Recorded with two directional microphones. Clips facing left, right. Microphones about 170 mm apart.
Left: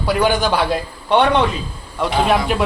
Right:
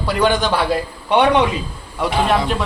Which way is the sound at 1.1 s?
10° right (ahead or behind).